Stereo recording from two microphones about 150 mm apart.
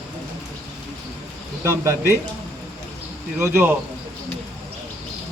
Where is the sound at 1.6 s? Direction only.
15° right (ahead or behind).